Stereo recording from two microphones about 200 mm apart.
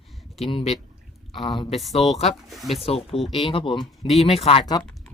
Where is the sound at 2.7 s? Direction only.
30° left (ahead or behind).